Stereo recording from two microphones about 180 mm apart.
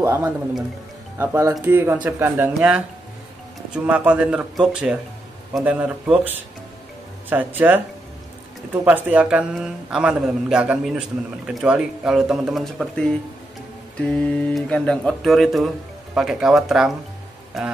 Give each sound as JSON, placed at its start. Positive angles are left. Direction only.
{"t": 0.0, "sound": "speech", "side_deg": -15}
{"t": 8.8, "sound": "a man's voice", "side_deg": -10}